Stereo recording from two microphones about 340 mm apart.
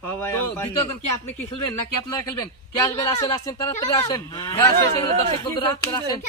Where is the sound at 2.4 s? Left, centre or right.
Centre.